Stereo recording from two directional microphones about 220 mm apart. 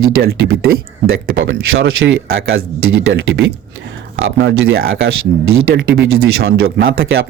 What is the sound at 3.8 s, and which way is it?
Speech, 60° right (ahead or behind).